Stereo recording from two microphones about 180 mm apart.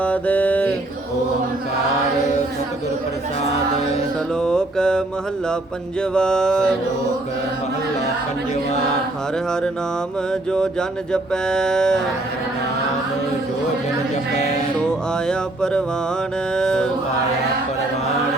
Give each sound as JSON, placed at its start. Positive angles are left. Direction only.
{"t": 0.0, "sound": "music", "side_deg": 10}
{"t": 4.4, "sound": "livestock", "side_deg": 5}
{"t": 10.5, "sound": "livestock", "side_deg": 5}
{"t": 14.8, "sound": "livestock", "side_deg": 5}